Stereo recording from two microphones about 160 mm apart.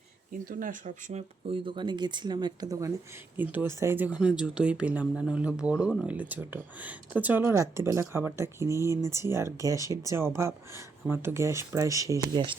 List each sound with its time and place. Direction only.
0.3 s speech: 55° right (ahead or behind)
1.5 s speech: 30° right (ahead or behind)